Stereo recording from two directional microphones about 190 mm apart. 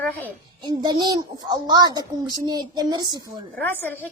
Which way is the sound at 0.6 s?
20° right (ahead or behind).